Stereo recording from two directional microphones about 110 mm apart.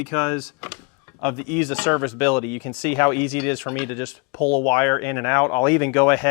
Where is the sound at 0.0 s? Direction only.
15° left (ahead or behind).